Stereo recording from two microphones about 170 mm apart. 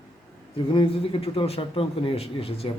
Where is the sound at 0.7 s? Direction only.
30° left (ahead or behind).